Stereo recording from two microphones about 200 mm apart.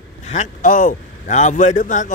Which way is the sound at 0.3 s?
40° left (ahead or behind).